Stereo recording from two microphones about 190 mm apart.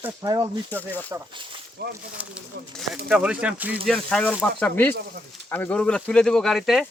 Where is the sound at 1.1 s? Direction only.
25° right (ahead or behind).